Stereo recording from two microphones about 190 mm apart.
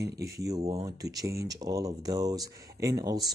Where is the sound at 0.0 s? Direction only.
15° right (ahead or behind).